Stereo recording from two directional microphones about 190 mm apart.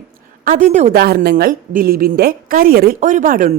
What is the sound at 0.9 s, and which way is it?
Speech, 55° right (ahead or behind).